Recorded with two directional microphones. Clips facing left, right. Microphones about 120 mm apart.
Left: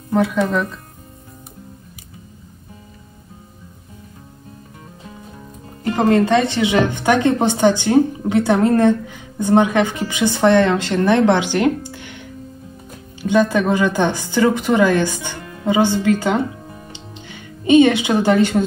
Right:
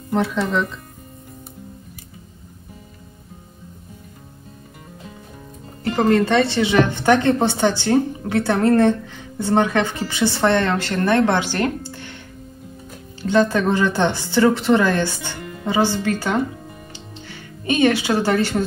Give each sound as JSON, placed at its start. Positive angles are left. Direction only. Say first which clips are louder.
{"t": 0.1, "sound": "speech", "louder": "left 3 dB", "side_deg": 0}
{"t": 5.9, "sound": "a woman's voice", "louder": "left 2 dB", "side_deg": 15}
{"t": 13.2, "sound": "a woman's voice", "louder": "left 1 dB", "side_deg": 15}
{"t": 16.9, "sound": "music", "louder": "left 1 dB", "side_deg": 20}